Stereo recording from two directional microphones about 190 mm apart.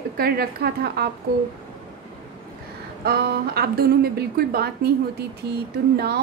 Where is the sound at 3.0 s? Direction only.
55° right (ahead or behind).